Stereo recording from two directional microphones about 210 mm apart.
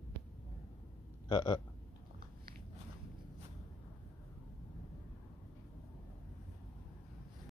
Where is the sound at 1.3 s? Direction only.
20° left (ahead or behind).